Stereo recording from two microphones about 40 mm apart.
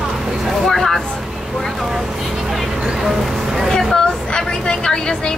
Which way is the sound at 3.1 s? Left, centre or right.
Centre.